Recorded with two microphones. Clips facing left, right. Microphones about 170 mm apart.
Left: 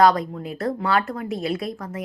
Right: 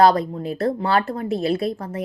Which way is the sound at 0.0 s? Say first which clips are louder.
Right 2 dB; 30° right (ahead or behind).